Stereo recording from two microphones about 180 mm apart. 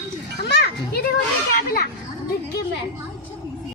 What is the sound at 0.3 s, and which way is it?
Children playing, 65° left (ahead or behind).